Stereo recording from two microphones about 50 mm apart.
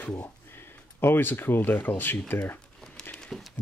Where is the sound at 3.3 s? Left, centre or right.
Centre.